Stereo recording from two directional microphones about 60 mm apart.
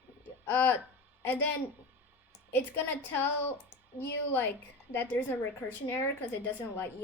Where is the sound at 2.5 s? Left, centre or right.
Left.